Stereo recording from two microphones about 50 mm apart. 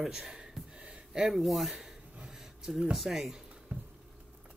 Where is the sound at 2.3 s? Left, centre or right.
Centre.